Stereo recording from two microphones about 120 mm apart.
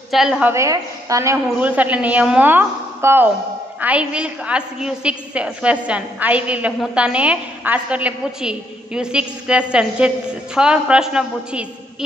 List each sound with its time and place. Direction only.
0.1 s a woman's voice: centre (ahead or behind)
0.4 s a woman's voice: 20° right (ahead or behind)
1.6 s a woman's voice: 10° right (ahead or behind)